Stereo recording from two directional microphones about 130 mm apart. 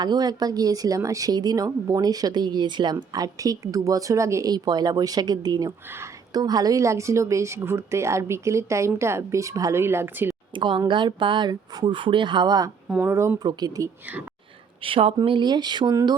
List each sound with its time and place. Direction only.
0.0 s speech: 30° right (ahead or behind)
10.5 s speech: 40° right (ahead or behind)
13.0 s speech: 20° right (ahead or behind)
13.5 s speech: 30° right (ahead or behind)
14.8 s speech: 45° right (ahead or behind)